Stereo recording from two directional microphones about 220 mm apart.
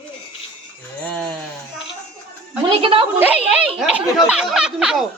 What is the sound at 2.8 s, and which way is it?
Speech, 25° right (ahead or behind).